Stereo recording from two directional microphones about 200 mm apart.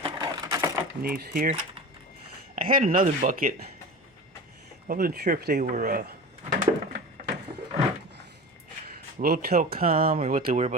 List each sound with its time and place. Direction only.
0.0 s a sound: 20° right (ahead or behind)
1.0 s speech: 50° right (ahead or behind)
2.6 s speech: 45° right (ahead or behind)
4.9 s speech: 50° right (ahead or behind)
9.2 s speech: 50° right (ahead or behind)